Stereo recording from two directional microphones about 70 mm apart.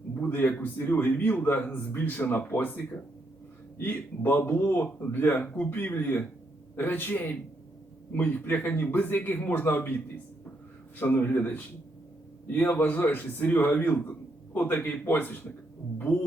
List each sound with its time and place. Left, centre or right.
0.2 s a man's voice: left
11.0 s a man's voice: left